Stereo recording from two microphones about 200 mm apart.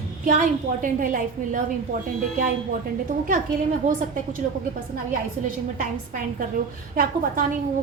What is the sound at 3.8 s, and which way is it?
Speech, 35° right (ahead or behind).